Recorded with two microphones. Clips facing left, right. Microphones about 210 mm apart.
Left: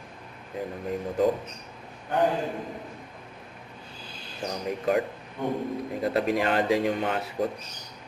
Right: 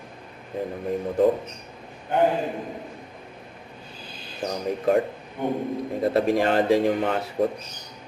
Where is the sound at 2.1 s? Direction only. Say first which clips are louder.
Right 3 dB; 20° right (ahead or behind).